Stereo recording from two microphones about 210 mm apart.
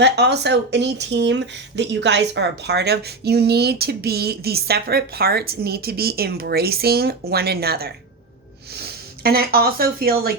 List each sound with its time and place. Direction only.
0.0 s speech: 55° right (ahead or behind)